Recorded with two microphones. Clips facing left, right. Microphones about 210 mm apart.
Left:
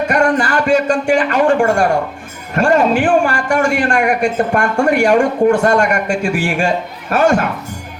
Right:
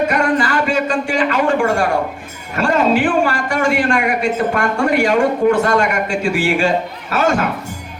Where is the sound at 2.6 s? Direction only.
45° left (ahead or behind).